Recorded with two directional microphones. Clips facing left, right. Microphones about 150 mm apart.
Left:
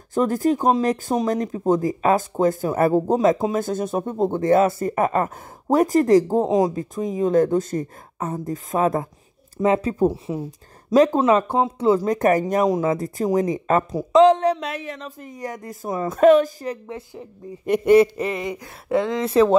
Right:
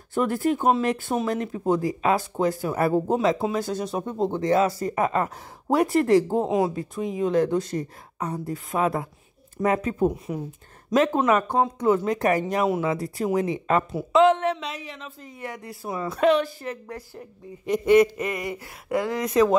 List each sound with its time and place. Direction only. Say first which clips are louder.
0.1 s speech: left 3 dB; 40° left (ahead or behind)
9.6 s speech: left 4 dB; 30° left (ahead or behind)
14.7 s speech: left 6 dB; 55° left (ahead or behind)
15.0 s speech: left 4 dB; 40° left (ahead or behind)
16.8 s a woman's voice: left 3 dB; 15° left (ahead or behind)
17.9 s speech: left 2 dB; 30° left (ahead or behind)